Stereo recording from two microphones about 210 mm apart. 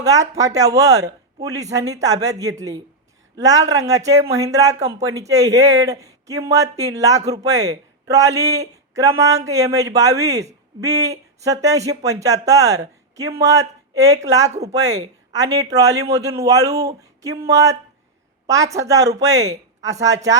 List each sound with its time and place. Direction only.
0.0 s speech: 15° right (ahead or behind)
14.4 s speech: 30° right (ahead or behind)
14.7 s speech: 15° right (ahead or behind)